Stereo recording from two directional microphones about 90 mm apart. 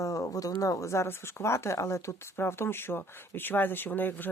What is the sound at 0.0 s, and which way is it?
Speech, 35° left (ahead or behind).